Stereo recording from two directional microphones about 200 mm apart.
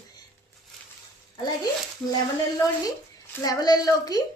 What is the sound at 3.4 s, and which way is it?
Speech, 20° left (ahead or behind).